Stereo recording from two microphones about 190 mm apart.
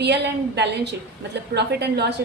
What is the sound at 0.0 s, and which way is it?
A woman's voice, 65° right (ahead or behind).